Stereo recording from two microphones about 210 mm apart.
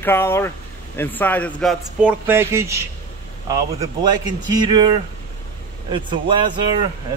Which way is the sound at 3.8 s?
20° right (ahead or behind).